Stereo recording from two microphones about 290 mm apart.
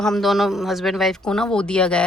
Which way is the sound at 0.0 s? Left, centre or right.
Centre.